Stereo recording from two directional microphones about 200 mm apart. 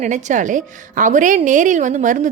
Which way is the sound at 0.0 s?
35° right (ahead or behind).